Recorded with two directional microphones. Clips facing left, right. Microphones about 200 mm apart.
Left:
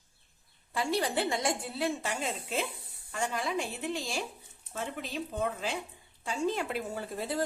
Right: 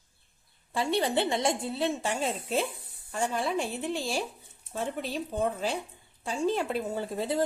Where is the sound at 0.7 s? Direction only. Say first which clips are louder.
Right 3 dB; 25° right (ahead or behind).